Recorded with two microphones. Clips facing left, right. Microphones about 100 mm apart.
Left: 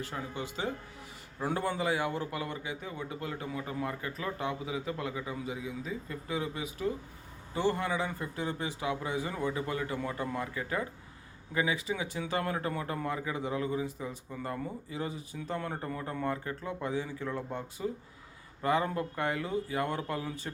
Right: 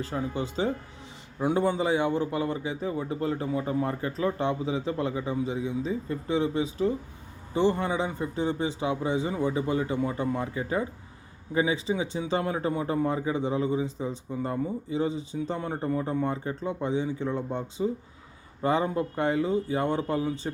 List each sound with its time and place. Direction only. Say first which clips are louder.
0.0 s speech: right 7 dB; 30° right (ahead or behind)
1.4 s speech: right 7 dB; 20° right (ahead or behind)